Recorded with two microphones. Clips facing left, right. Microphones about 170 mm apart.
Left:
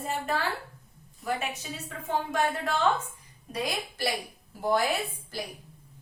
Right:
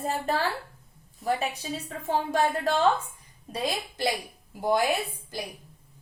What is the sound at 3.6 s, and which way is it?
A woman's voice, 20° right (ahead or behind).